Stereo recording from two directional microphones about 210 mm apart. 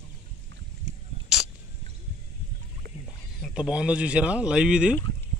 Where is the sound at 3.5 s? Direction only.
5° right (ahead or behind).